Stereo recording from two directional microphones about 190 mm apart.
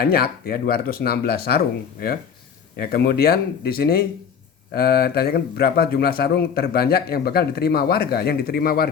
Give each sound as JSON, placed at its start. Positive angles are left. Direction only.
{"t": 0.0, "sound": "speech", "side_deg": 55}